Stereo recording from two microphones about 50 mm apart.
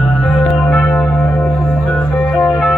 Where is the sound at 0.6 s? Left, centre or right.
Left.